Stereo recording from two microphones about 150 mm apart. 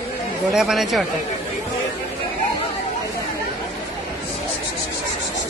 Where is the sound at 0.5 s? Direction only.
Centre (ahead or behind).